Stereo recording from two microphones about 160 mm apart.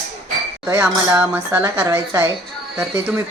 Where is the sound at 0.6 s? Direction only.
20° right (ahead or behind).